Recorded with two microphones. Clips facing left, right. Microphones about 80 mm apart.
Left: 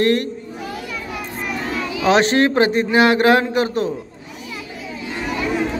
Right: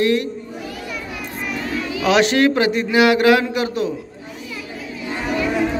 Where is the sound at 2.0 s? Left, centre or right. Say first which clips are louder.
Even; left.